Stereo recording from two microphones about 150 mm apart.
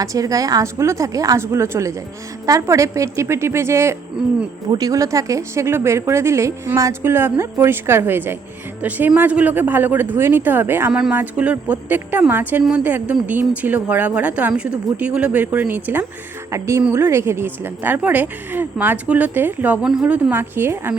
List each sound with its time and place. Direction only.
0.0 s a woman's voice: 25° right (ahead or behind)